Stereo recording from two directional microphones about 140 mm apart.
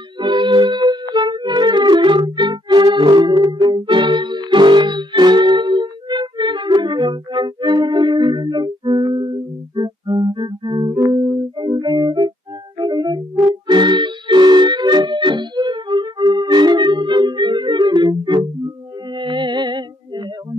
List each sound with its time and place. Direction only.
0.2 s music: 35° right (ahead or behind)